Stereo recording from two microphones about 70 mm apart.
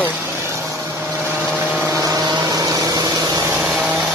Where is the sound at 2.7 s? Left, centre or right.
Right.